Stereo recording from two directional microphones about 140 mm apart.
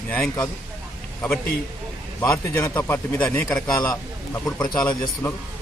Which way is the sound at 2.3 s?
20° left (ahead or behind).